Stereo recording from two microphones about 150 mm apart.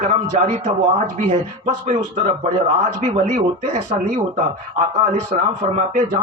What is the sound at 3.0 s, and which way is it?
Speech, 50° right (ahead or behind).